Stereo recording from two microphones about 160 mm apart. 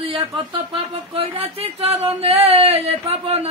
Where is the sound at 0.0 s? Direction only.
35° right (ahead or behind).